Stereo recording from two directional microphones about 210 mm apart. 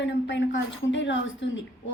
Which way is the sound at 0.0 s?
60° left (ahead or behind).